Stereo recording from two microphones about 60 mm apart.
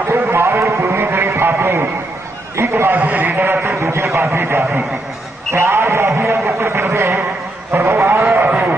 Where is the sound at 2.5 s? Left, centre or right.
Right.